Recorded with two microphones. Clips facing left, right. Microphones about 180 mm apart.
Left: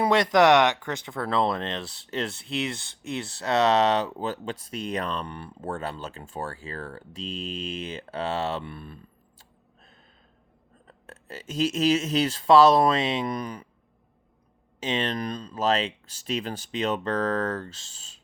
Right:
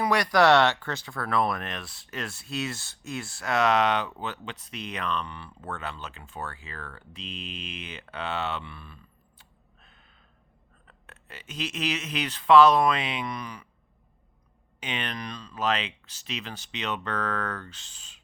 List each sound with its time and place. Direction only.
0.0 s speech: 25° left (ahead or behind)
8.6 s speech: 45° left (ahead or behind)
10.8 s speech: 45° left (ahead or behind)
13.2 s speech: 45° left (ahead or behind)
14.8 s speech: 30° left (ahead or behind)
15.2 s speech: 45° left (ahead or behind)